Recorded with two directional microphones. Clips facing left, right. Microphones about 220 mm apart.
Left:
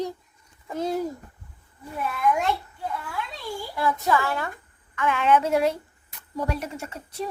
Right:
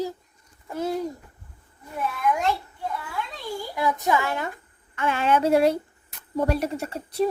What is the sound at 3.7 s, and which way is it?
Speech, 15° right (ahead or behind).